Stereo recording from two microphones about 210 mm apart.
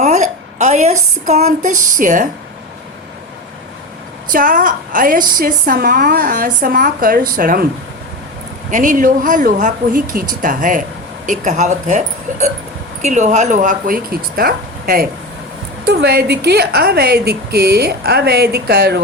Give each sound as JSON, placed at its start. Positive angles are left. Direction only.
{"t": 0.0, "sound": "a sound", "side_deg": -35}
{"t": 1.3, "sound": "a woman's voice", "side_deg": -30}
{"t": 4.3, "sound": "a woman's voice", "side_deg": -40}
{"t": 8.7, "sound": "a woman's voice", "side_deg": -35}